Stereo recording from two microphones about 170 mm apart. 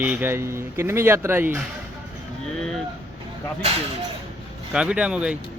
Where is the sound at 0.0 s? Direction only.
10° right (ahead or behind).